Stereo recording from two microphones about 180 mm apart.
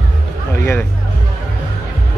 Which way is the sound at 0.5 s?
15° left (ahead or behind).